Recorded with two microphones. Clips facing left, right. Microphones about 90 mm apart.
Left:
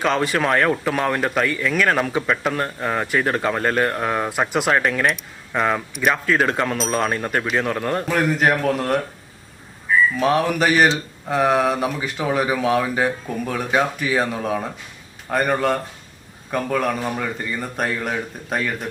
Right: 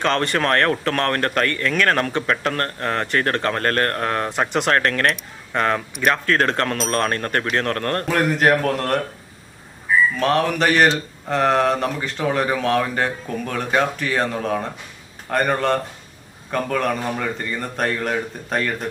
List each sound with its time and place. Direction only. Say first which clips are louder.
0.0 s speech: even; 5° left (ahead or behind)
10.2 s speech: even; 5° left (ahead or behind)